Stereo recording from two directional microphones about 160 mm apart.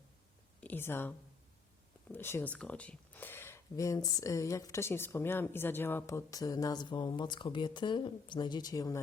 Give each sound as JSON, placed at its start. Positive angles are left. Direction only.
{"t": 0.6, "sound": "speech", "side_deg": 10}
{"t": 2.1, "sound": "speech", "side_deg": 15}